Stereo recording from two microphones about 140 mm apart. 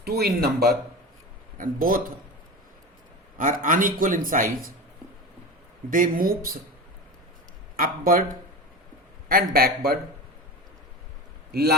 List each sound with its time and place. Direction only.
0.1 s speech: 90° right
3.3 s a man's voice: 70° right (ahead or behind)
5.9 s speech: 80° right
7.8 s speech: 90° right
9.3 s speech: 90° right
11.5 s speech: 90° right